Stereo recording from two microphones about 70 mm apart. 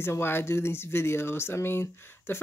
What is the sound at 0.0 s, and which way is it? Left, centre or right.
Speech, left.